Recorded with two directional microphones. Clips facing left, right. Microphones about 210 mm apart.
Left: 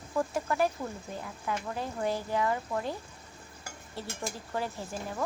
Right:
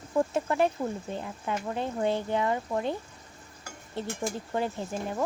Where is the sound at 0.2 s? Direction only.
25° right (ahead or behind).